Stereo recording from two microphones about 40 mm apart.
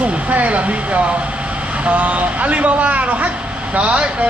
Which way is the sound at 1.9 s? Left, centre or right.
Right.